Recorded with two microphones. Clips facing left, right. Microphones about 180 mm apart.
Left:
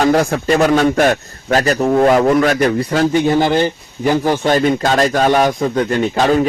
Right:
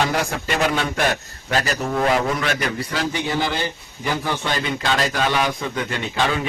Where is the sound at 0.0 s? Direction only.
40° left (ahead or behind).